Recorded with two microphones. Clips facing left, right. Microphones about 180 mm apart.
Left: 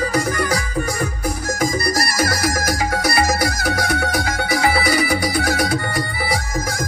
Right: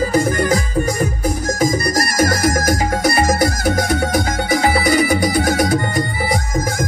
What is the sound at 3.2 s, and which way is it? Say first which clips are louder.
Music: right 3 dB; 50° right (ahead or behind).